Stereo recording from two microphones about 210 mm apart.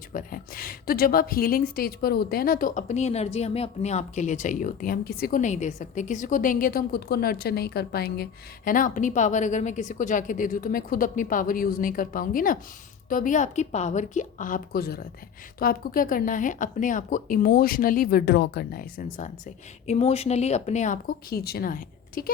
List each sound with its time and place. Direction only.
0.1 s a woman's voice: 40° left (ahead or behind)
19.9 s a woman's voice: 30° left (ahead or behind)